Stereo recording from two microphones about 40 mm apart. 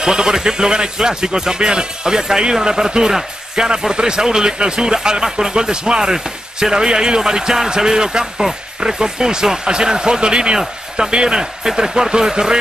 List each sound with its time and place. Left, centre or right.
0.0 s a man's voice: centre